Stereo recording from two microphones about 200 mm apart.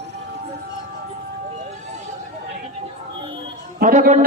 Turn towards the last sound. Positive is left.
turn(degrees=-40)  # may be behind; listen again after turning